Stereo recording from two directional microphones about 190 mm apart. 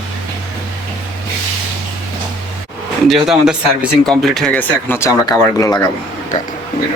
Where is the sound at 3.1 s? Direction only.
Centre (ahead or behind); by 5.8 s 20° left (ahead or behind).